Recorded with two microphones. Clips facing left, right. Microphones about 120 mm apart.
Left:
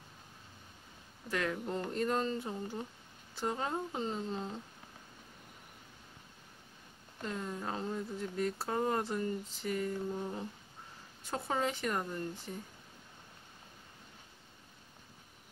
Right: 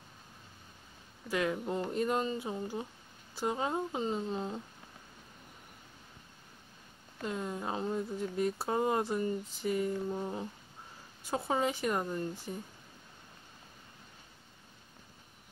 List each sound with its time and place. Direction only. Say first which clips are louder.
1.3 s speech: right 3 dB; 10° right (ahead or behind)
7.2 s speech: right 3 dB; 15° right (ahead or behind)